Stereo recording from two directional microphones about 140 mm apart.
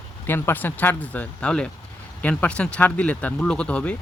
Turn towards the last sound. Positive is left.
turn(degrees=10)  # may be behind; listen again after turning